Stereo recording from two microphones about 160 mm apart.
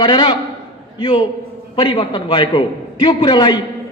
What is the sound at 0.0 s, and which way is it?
A man's voice, 30° left (ahead or behind).